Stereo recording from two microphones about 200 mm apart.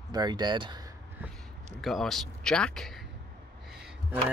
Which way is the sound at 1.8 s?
Centre (ahead or behind).